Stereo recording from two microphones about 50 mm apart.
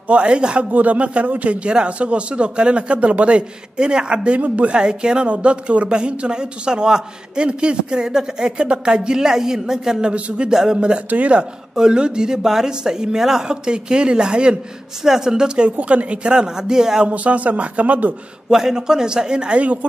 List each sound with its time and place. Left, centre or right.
0.1 s a man's voice: right
0.7 s a man's voice: right; by 10.1 s centre
10.1 s a man's voice: right
10.5 s speech: centre
11.1 s a man's voice: right
11.7 s speech: centre
17.1 s a man's voice: right
18.5 s speech: centre; by 19.9 s right